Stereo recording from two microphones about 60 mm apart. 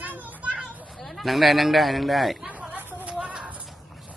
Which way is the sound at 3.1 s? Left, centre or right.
Centre.